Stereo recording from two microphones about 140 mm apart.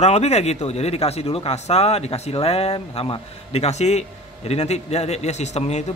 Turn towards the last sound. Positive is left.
turn(degrees=55)  # may be behind; listen again after turning